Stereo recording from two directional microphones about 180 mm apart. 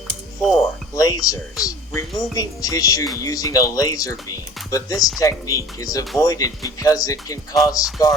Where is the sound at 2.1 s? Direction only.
Centre (ahead or behind).